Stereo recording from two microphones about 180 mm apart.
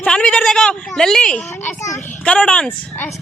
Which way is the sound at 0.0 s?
5° left (ahead or behind).